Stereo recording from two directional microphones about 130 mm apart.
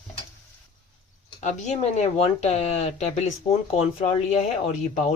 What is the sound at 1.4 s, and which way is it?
Speech, 70° left (ahead or behind).